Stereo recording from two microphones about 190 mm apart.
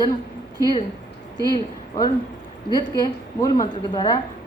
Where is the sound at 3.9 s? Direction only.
25° left (ahead or behind).